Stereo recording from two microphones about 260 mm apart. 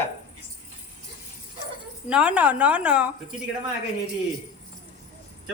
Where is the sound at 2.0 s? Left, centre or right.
Centre.